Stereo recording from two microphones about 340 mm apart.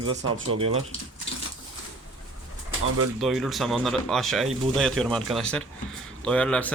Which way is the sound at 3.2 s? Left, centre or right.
Centre.